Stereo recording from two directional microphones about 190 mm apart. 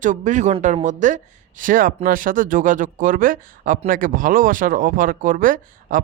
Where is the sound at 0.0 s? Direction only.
40° right (ahead or behind).